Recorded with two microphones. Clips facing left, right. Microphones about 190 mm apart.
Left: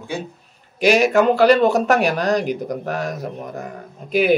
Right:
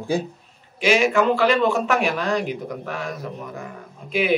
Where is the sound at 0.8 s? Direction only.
40° left (ahead or behind).